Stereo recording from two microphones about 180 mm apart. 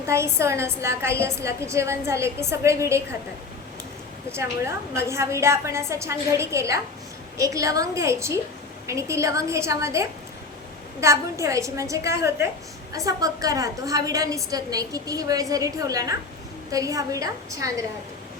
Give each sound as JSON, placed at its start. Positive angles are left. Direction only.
{"t": 0.1, "sound": "a woman's voice", "side_deg": -15}
{"t": 4.3, "sound": "a woman's voice", "side_deg": -15}